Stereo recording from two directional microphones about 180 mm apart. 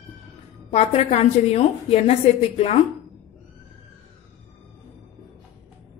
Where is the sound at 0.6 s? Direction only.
35° left (ahead or behind).